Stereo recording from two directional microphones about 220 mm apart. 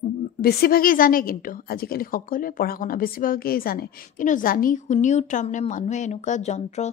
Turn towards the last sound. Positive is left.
turn(degrees=30)  # may be behind; listen again after turning